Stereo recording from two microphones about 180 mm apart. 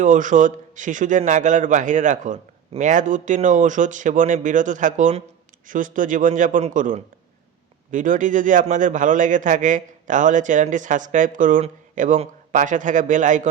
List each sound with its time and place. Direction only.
0.0 s a man's voice: 45° right (ahead or behind)